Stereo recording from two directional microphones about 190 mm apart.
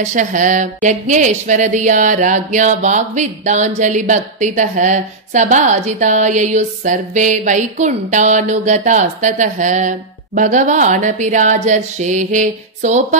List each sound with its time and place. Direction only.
0.0 s speech: 40° right (ahead or behind)